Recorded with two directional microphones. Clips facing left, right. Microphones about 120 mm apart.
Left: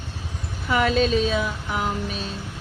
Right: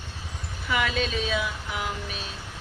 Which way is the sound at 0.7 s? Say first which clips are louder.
Left 7 dB; 40° left (ahead or behind).